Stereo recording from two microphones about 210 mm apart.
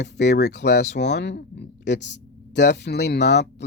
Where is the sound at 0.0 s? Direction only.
55° left (ahead or behind).